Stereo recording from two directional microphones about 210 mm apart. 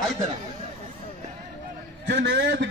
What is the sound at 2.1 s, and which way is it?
Speech, 55° right (ahead or behind).